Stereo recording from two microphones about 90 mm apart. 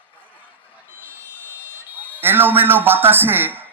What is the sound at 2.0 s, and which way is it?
A man's voice, 25° right (ahead or behind).